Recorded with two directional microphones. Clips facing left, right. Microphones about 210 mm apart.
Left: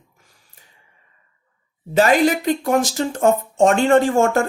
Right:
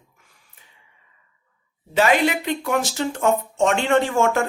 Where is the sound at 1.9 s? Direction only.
40° left (ahead or behind).